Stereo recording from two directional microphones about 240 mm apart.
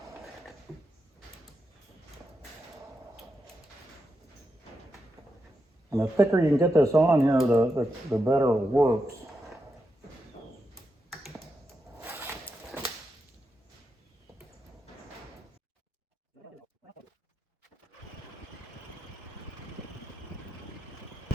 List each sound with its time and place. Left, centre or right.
5.9 s speech: centre
11.9 s a sound: centre
12.7 s whip: centre